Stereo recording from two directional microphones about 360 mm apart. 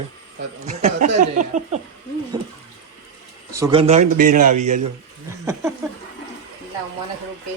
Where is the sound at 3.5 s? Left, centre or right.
Centre.